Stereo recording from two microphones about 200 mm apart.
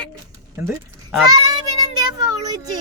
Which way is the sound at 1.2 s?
20° right (ahead or behind).